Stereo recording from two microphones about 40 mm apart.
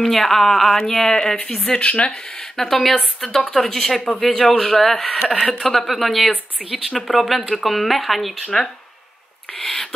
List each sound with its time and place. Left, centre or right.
0.0 s speech: centre
1.7 s speech: left
2.5 s speech: centre
9.6 s speech: centre